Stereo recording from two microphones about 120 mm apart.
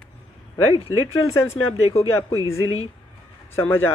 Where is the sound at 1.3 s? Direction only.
25° left (ahead or behind).